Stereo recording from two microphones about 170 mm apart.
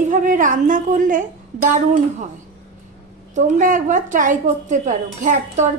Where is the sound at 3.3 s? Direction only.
50° right (ahead or behind).